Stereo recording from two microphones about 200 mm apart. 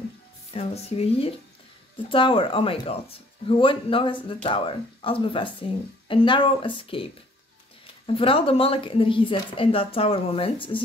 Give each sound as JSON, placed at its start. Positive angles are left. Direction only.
{"t": 0.5, "sound": "a woman's voice", "side_deg": 30}